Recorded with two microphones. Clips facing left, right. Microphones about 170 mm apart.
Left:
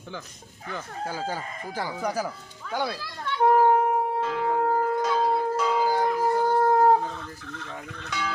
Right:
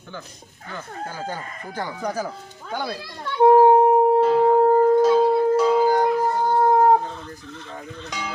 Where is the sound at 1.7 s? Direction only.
10° left (ahead or behind).